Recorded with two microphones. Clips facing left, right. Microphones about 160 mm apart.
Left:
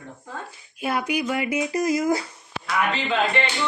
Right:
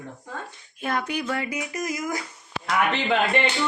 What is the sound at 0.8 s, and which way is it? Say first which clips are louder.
Speech: left 2 dB; 10° left (ahead or behind).